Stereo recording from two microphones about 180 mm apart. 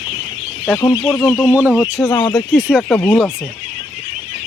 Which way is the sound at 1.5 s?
10° right (ahead or behind).